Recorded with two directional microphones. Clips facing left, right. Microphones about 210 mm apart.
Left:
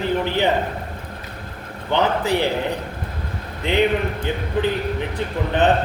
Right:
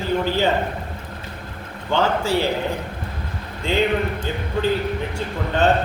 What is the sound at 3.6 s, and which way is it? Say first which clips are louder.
Speech: left 1 dB; 20° left (ahead or behind).